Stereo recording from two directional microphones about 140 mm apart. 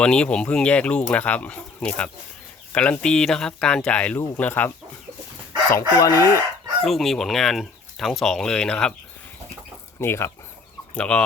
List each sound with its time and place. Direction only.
0.0 s speech: 5° left (ahead or behind)
6.0 s chicken: 25° left (ahead or behind)
6.8 s speech: centre (ahead or behind)
10.0 s speech: 15° left (ahead or behind)